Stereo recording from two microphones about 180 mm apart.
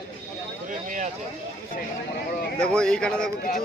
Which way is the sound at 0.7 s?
45° right (ahead or behind).